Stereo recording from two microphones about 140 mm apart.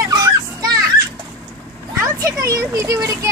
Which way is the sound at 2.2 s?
25° right (ahead or behind).